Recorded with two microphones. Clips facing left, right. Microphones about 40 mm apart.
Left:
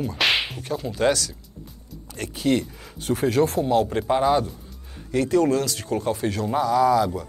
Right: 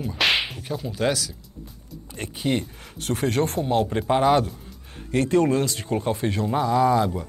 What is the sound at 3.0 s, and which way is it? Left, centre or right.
Speech, right.